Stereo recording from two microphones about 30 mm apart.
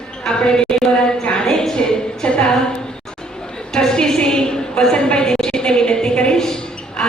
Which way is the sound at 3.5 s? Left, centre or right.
Left.